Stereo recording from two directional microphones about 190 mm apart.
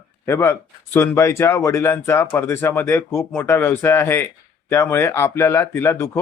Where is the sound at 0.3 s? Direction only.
15° left (ahead or behind).